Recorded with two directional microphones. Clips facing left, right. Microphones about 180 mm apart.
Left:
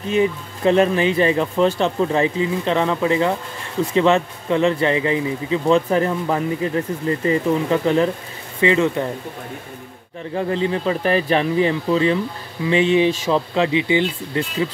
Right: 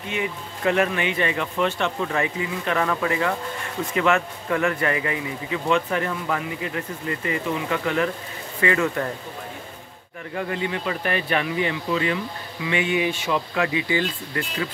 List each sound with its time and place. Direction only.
0.0 s speech: 35° left (ahead or behind)
10.3 s speech: 30° left (ahead or behind)